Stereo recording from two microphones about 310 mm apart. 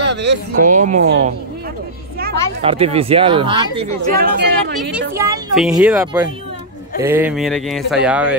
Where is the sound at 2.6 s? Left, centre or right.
Centre.